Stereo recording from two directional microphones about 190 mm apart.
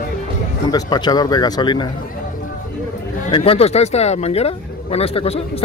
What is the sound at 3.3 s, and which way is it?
Speech, 30° left (ahead or behind).